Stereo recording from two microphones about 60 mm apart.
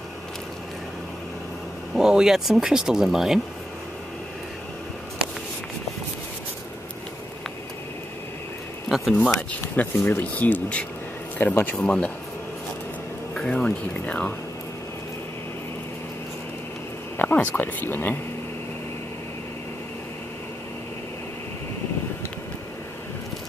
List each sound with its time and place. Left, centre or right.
2.0 s speech: centre
8.8 s a sound: centre
9.9 s speech: left
10.3 s speech: left
11.4 s speech: left
11.8 s speech: centre
13.3 s speech: centre
17.2 s speech: left